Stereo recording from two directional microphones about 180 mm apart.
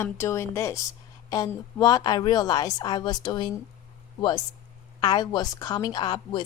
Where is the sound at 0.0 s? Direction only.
15° left (ahead or behind).